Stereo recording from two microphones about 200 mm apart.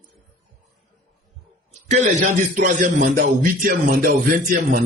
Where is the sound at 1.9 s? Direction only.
40° right (ahead or behind).